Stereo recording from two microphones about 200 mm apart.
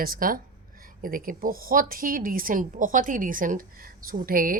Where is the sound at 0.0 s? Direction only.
45° right (ahead or behind).